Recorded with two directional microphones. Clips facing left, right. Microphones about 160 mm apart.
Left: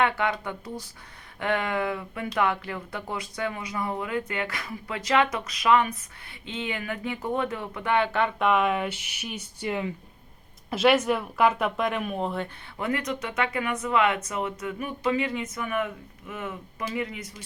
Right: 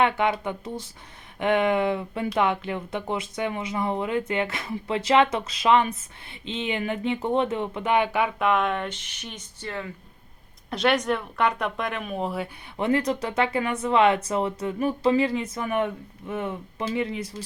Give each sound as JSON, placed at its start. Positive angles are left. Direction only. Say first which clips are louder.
{"t": 0.0, "sound": "speech", "louder": "right 3 dB", "side_deg": -20}
{"t": 8.4, "sound": "speech", "louder": "left 2 dB", "side_deg": 0}
{"t": 10.7, "sound": "speech", "louder": "left 2 dB", "side_deg": 5}
{"t": 12.7, "sound": "speech", "louder": "right 6 dB", "side_deg": -25}